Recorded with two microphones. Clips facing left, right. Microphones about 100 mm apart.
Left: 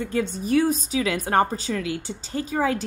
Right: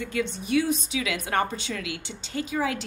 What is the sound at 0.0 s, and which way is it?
A woman's voice, 40° left (ahead or behind).